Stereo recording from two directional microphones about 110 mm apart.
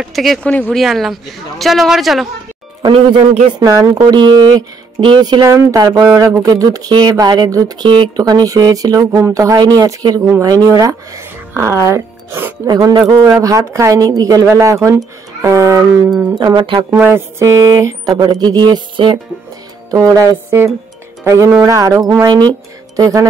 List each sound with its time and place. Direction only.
0.0 s speech: centre (ahead or behind)
0.5 s speech: 10° left (ahead or behind)
0.7 s speech: centre (ahead or behind)
2.8 s speech: 50° right (ahead or behind)
3.6 s speech: 35° right (ahead or behind)
5.5 s speech: 30° right (ahead or behind)
6.0 s speech: 25° right (ahead or behind)
12.6 s speech: 35° right (ahead or behind)
16.3 s speech: 45° right (ahead or behind)
16.9 s speech: 20° right (ahead or behind); by 19.1 s 45° right (ahead or behind)
19.9 s speech: 30° right (ahead or behind)
21.3 s speech: 25° right (ahead or behind)